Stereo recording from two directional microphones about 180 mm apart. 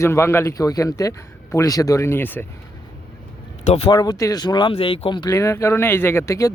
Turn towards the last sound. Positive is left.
turn(degrees=15)  # may be behind; listen again after turning